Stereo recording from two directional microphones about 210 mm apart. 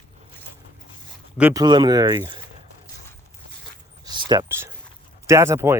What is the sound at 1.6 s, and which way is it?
Speech, 20° right (ahead or behind).